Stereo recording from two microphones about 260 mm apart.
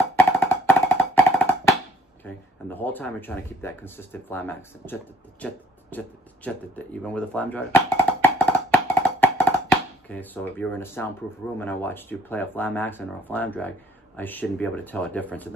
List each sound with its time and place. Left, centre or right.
0.1 s music: centre
2.7 s speech: centre
5.4 s a sound: centre
11.5 s speech: centre